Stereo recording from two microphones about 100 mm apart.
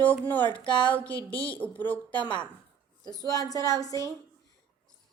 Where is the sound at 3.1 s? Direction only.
40° left (ahead or behind).